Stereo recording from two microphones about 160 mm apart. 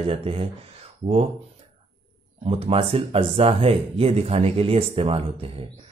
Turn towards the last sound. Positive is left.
turn(degrees=-35)  # may be behind; listen again after turning